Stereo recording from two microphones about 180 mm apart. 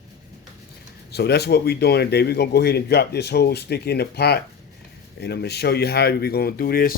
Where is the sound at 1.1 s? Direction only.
65° left (ahead or behind).